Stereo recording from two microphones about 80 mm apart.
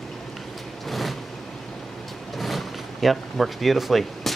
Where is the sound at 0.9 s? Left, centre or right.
Centre.